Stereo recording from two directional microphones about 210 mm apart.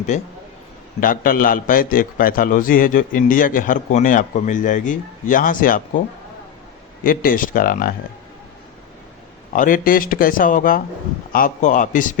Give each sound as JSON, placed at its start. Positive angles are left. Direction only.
{"t": 0.1, "sound": "a man's voice", "side_deg": 35}
{"t": 7.0, "sound": "a man's voice", "side_deg": 40}
{"t": 9.5, "sound": "a man's voice", "side_deg": 40}